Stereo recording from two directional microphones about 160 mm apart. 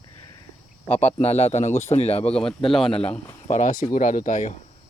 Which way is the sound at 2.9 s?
40° left (ahead or behind).